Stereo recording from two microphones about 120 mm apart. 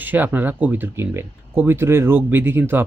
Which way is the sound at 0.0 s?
15° right (ahead or behind).